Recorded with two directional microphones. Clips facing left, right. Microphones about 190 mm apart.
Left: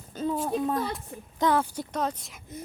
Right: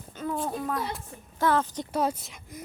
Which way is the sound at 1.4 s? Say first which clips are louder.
Even; 10° left (ahead or behind).